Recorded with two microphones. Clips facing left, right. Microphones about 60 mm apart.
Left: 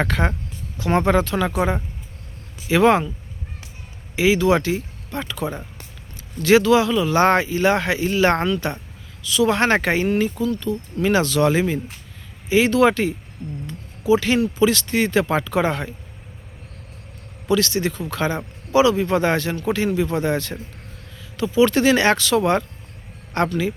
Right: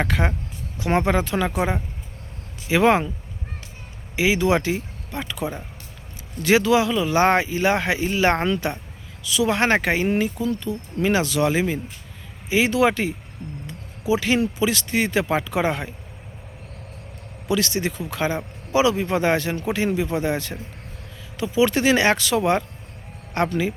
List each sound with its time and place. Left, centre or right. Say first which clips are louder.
0.0 s speech: left 2 dB; centre
0.8 s speech: left 2 dB; centre
2.6 s speech: left 2 dB; centre
4.1 s speech: left 2 dB; centre
13.7 s a sound: left 5 dB; centre
14.6 s speech: left 4 dB; centre
17.5 s a man's voice: left 3 dB; centre